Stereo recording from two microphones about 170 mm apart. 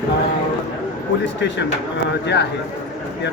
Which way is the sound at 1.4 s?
90° left.